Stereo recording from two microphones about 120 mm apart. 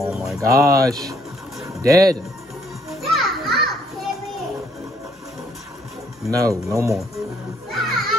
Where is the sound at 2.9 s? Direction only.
Centre (ahead or behind).